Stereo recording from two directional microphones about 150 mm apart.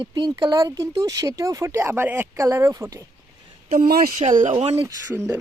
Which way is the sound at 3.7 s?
70° right (ahead or behind).